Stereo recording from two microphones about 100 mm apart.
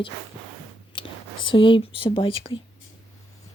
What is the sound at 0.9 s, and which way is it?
Whispering, 55° left (ahead or behind).